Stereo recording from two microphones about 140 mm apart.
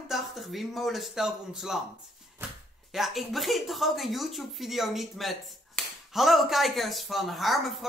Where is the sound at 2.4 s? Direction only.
15° right (ahead or behind).